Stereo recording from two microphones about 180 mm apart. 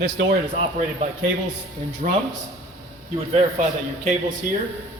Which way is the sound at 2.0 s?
50° right (ahead or behind).